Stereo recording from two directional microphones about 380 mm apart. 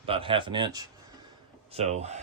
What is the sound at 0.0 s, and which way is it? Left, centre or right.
Speech, centre.